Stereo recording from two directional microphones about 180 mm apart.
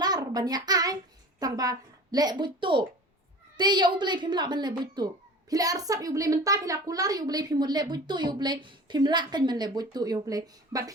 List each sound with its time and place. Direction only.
0.0 s child singing: 20° right (ahead or behind)
1.4 s a woman's voice: 20° right (ahead or behind)